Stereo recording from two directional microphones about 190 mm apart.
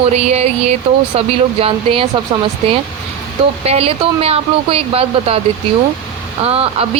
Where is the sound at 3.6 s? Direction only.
30° right (ahead or behind).